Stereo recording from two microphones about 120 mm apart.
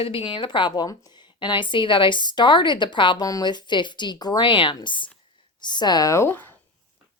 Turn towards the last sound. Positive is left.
turn(degrees=15)  # may be behind; listen again after turning